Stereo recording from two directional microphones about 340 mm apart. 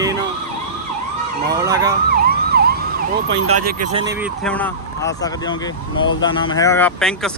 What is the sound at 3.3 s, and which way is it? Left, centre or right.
Speech, right.